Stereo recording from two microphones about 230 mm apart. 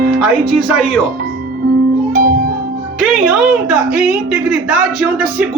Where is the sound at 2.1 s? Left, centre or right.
Right.